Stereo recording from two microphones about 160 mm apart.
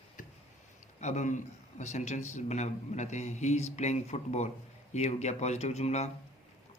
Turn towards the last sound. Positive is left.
turn(degrees=45)  # may be behind; listen again after turning